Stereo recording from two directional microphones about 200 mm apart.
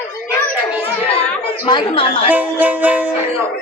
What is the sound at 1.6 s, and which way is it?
Speech, 25° left (ahead or behind).